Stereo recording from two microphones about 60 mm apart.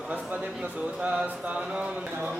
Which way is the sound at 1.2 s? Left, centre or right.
Right.